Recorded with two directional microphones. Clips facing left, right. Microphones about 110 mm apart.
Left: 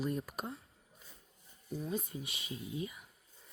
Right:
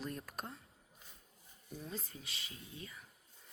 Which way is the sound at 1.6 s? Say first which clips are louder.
Left 8 dB; 10° left (ahead or behind).